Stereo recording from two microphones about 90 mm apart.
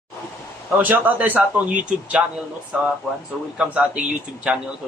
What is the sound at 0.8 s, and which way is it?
A man's voice, 20° right (ahead or behind).